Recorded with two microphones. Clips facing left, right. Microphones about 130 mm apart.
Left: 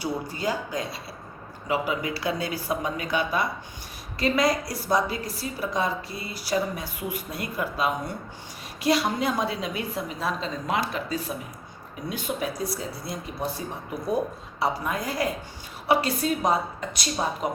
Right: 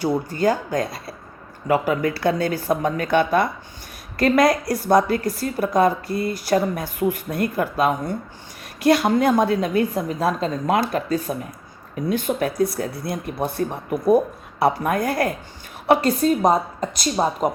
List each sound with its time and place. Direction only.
0.0 s a woman's voice: 50° right (ahead or behind)